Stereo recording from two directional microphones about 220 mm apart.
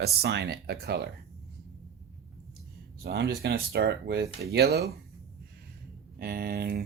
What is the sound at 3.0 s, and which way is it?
Speech, 45° right (ahead or behind).